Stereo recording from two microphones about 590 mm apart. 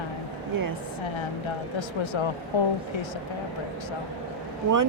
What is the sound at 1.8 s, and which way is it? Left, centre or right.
Speech, left.